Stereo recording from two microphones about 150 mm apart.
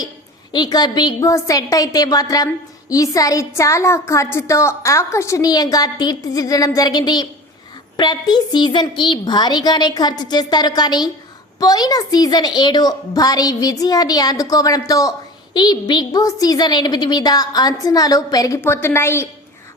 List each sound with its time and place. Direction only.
0.5 s a woman's voice: 25° left (ahead or behind)